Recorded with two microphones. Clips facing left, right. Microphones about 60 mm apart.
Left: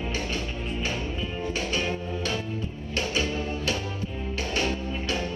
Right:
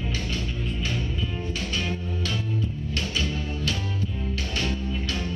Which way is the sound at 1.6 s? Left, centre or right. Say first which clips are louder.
Left 2 dB; left.